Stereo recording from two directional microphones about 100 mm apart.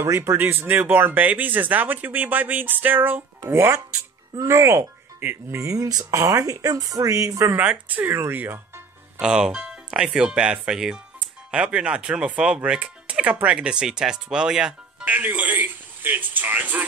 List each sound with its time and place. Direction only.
0.0 s speech: 25° right (ahead or behind)
7.5 s speech: 15° right (ahead or behind)
9.2 s speech: 10° right (ahead or behind)